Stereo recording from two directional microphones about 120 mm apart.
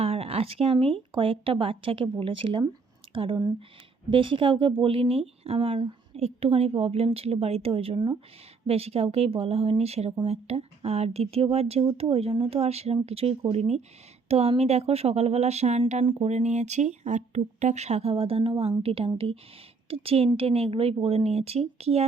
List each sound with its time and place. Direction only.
0.0 s speech: 55° right (ahead or behind)